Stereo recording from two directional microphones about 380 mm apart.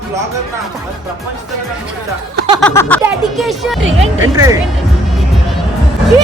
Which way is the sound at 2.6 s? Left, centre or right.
Centre.